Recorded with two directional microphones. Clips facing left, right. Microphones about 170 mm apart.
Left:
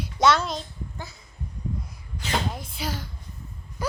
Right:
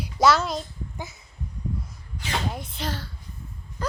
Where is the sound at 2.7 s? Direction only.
10° left (ahead or behind).